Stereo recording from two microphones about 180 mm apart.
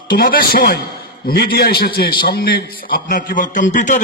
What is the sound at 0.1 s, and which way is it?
A man's voice, 55° left (ahead or behind).